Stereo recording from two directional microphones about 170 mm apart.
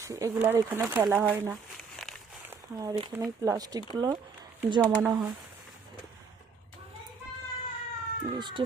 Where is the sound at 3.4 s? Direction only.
20° right (ahead or behind).